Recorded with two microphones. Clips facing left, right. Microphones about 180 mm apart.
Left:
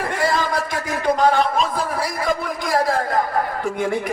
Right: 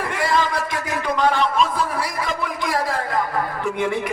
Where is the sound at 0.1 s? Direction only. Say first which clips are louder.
Even; 40° left (ahead or behind).